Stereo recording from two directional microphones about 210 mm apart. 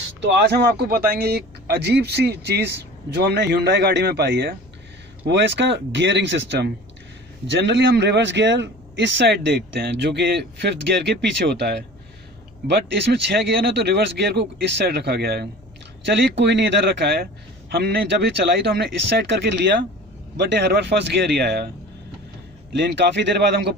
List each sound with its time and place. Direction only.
0.2 s speech: 55° right (ahead or behind)
22.8 s speech: 55° right (ahead or behind)